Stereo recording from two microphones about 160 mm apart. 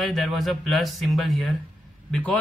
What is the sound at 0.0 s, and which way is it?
Speech, centre (ahead or behind).